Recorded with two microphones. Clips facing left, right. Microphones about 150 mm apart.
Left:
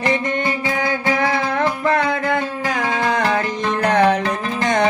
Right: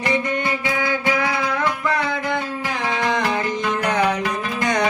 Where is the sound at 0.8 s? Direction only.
45° left (ahead or behind).